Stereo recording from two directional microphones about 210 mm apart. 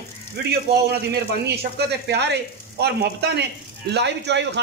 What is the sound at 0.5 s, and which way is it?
Speech, 50° right (ahead or behind).